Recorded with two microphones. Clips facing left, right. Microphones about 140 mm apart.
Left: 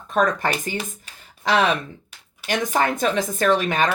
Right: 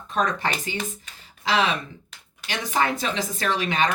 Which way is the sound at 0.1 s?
50° left (ahead or behind).